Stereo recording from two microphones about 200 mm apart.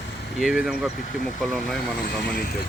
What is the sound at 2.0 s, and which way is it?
Speech, 45° left (ahead or behind).